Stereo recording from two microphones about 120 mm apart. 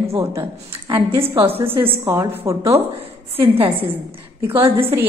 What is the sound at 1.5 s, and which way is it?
A woman's voice, 20° right (ahead or behind).